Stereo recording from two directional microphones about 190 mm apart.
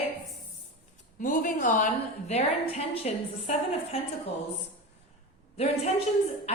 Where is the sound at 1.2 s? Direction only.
45° left (ahead or behind).